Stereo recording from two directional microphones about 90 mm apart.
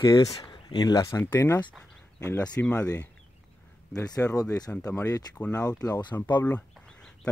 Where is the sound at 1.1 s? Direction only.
25° left (ahead or behind).